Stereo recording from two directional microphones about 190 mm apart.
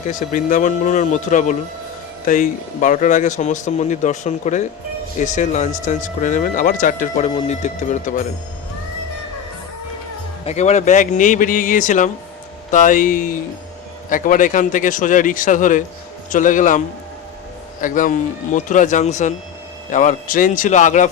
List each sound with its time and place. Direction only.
0.1 s speech: 45° left (ahead or behind)
10.4 s speech: 35° left (ahead or behind)